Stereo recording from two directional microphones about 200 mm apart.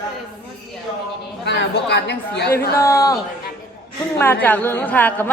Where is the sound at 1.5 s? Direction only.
60° left (ahead or behind).